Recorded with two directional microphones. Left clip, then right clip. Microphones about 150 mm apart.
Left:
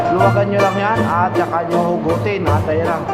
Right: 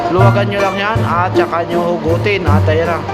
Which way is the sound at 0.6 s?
20° right (ahead or behind).